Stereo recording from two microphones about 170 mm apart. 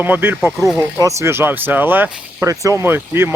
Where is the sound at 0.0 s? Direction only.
10° right (ahead or behind).